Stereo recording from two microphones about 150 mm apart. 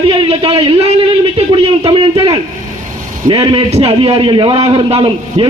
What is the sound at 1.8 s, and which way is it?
A man's voice, 35° right (ahead or behind).